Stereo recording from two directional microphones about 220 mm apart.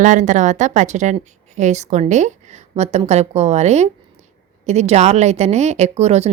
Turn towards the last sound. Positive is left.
turn(degrees=-30)  # may be behind; listen again after turning